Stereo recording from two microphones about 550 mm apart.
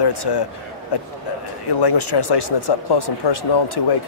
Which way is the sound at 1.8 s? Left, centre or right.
Left.